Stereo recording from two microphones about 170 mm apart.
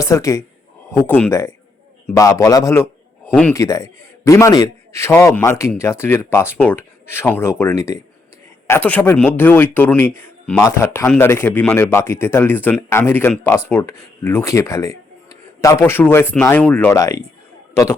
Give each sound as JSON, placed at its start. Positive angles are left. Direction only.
{"t": 0.0, "sound": "a man's voice", "side_deg": 20}